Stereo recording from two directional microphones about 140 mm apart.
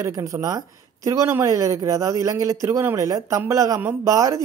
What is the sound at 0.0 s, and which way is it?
Speech, 20° right (ahead or behind).